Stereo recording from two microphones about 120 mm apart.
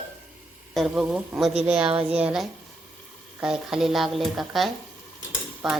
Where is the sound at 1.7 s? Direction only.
55° right (ahead or behind).